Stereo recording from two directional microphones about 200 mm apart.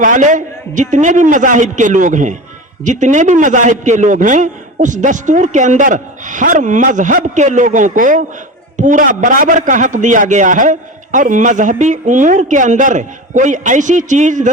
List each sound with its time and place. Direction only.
0.0 s a man's voice: 40° right (ahead or behind)